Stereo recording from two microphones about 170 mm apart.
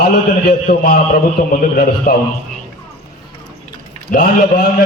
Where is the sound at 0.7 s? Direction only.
55° left (ahead or behind).